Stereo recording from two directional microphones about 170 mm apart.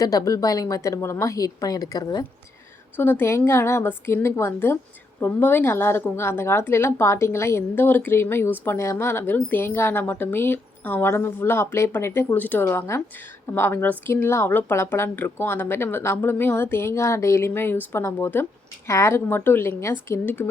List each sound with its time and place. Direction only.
0.0 s a woman's voice: 20° left (ahead or behind)
3.0 s a woman's voice: 10° left (ahead or behind)